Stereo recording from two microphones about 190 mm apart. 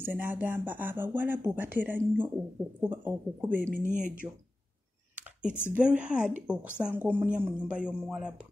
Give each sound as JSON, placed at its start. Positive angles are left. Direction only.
{"t": 0.0, "sound": "speech", "side_deg": -10}
{"t": 3.8, "sound": "speech", "side_deg": -40}
{"t": 5.1, "sound": "a sound", "side_deg": -5}
{"t": 5.8, "sound": "speech", "side_deg": -5}